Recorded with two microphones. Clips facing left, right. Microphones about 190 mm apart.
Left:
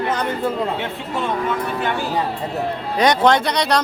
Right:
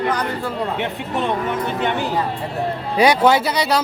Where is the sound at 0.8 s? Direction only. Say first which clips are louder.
Right 2 dB; 20° right (ahead or behind).